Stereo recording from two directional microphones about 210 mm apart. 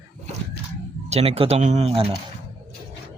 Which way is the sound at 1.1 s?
25° right (ahead or behind).